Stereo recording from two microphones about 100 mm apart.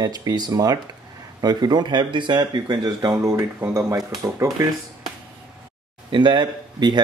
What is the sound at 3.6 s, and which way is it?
Speech, 20° right (ahead or behind).